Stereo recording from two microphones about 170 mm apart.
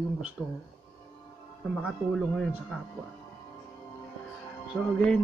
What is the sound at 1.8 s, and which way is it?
Speech, centre (ahead or behind).